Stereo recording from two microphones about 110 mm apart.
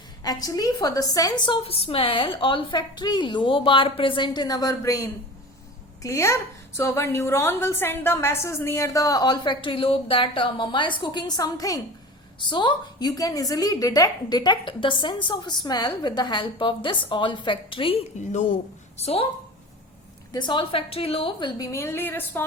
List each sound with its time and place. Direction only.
0.2 s a woman's voice: 35° left (ahead or behind)
1.5 s a woman's voice: 55° left (ahead or behind); by 11.8 s 35° left (ahead or behind)
12.4 s a woman's voice: 45° left (ahead or behind)
18.9 s a woman's voice: 70° left (ahead or behind)
20.3 s a woman's voice: 45° left (ahead or behind); by 21.3 s 60° left (ahead or behind)
21.3 s a woman's voice: 40° left (ahead or behind)
21.7 s a woman's voice: 25° left (ahead or behind)